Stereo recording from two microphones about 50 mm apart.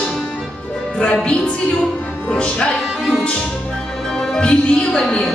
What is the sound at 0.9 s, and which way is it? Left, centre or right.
Speech, centre.